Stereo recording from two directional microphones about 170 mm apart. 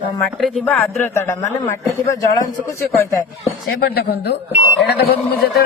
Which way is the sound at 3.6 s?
65° left (ahead or behind).